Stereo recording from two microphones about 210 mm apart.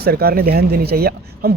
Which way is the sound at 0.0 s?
45° right (ahead or behind).